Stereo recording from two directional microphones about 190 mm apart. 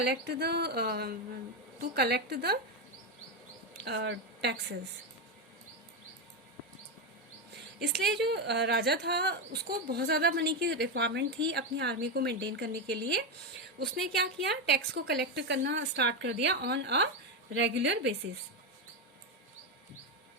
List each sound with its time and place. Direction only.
0.0 s speech: 60° right (ahead or behind)
3.8 s speech: 65° right (ahead or behind)
7.8 s a woman's voice: 65° right (ahead or behind)